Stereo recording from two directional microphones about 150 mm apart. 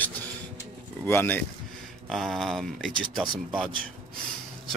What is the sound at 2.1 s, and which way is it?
Speech, centre (ahead or behind).